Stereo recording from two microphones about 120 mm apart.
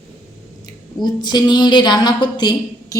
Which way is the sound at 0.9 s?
35° left (ahead or behind).